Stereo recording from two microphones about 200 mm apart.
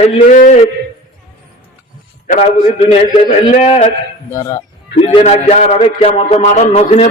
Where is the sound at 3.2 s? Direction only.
35° left (ahead or behind).